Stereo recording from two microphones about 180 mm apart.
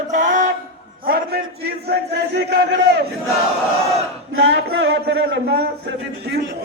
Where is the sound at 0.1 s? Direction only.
45° right (ahead or behind).